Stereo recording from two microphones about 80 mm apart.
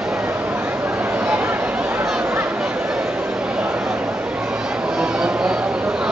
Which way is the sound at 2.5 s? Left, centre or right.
Centre.